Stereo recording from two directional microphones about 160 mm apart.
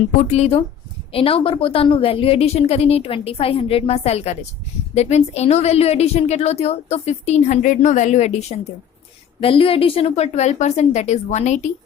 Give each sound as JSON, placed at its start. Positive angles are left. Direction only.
{"t": 0.3, "sound": "a woman's voice", "side_deg": 40}